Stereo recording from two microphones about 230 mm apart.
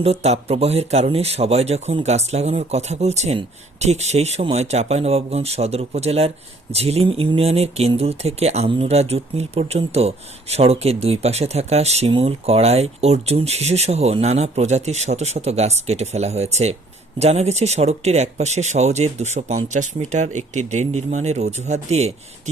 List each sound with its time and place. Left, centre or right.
0.0 s speech: right